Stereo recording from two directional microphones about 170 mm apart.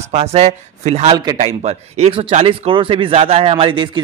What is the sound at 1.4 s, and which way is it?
Speech, 40° right (ahead or behind).